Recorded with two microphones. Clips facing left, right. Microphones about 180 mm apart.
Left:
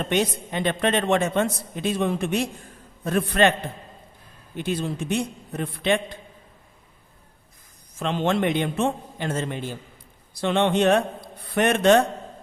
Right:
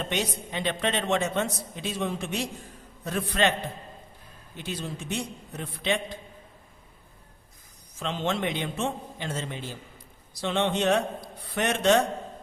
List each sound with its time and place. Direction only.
0.1 s a woman's voice: 50° left (ahead or behind)
4.5 s a woman's voice: 55° left (ahead or behind)
7.9 s a woman's voice: 55° left (ahead or behind)